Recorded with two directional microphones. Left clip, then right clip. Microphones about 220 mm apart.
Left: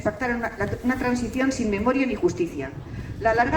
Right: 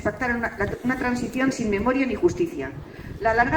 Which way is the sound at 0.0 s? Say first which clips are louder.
Right 1 dB; 35° right (ahead or behind).